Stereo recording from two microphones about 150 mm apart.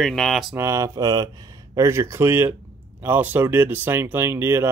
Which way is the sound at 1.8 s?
20° right (ahead or behind).